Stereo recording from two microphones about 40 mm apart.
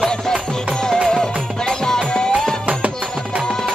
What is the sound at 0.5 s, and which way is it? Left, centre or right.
Music, centre.